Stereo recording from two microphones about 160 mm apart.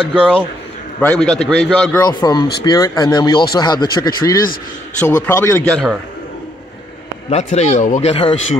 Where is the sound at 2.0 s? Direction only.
25° left (ahead or behind).